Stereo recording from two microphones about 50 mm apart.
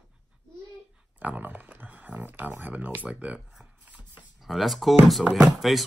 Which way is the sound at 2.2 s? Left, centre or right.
Right.